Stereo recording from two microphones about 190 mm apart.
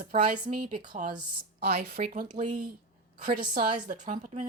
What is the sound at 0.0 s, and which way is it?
Speech, 30° right (ahead or behind).